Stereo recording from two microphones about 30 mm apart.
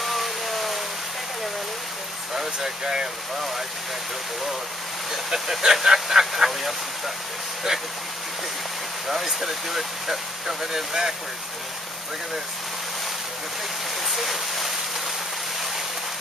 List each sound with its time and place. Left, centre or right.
0.0 s a sound: centre
2.3 s speech: centre
5.1 s speech: centre
9.1 s speech: centre
14.0 s speech: centre